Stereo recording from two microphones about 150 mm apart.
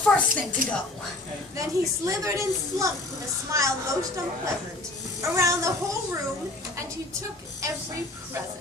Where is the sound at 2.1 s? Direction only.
20° right (ahead or behind).